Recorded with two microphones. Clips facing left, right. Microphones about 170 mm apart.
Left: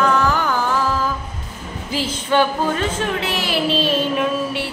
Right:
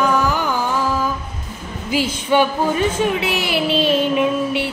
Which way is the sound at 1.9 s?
10° right (ahead or behind).